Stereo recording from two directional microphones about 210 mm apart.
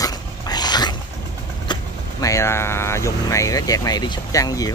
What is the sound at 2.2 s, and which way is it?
Speech, 15° left (ahead or behind).